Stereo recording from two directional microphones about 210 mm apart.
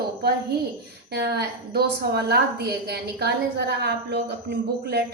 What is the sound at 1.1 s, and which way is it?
A woman's voice, 50° right (ahead or behind).